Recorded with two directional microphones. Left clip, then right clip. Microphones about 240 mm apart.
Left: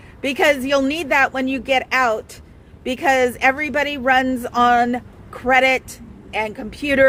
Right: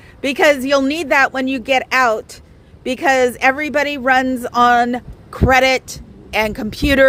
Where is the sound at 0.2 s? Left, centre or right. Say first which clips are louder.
Right 3 dB; right.